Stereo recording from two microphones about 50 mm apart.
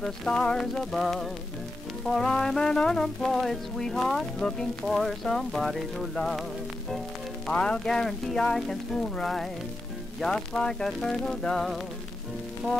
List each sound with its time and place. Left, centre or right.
0.0 s speech: centre
0.7 s speech: centre
3.3 s speech: centre
4.4 s speech: centre
4.8 s speech: centre
7.5 s speech: centre